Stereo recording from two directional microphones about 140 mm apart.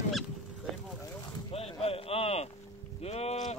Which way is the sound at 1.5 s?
45° left (ahead or behind).